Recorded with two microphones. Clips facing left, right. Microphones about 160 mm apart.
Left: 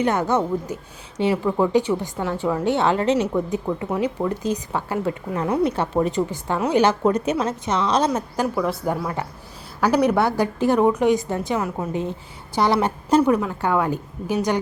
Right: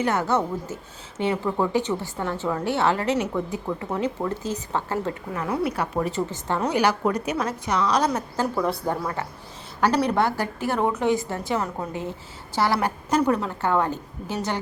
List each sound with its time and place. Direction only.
0.0 s a woman's voice: 20° left (ahead or behind)
5.3 s a woman's voice: 25° left (ahead or behind)
6.7 s a woman's voice: 25° left (ahead or behind)
8.5 s speech: centre (ahead or behind)
8.9 s a woman's voice: 10° left (ahead or behind)
13.2 s a woman's voice: 15° left (ahead or behind)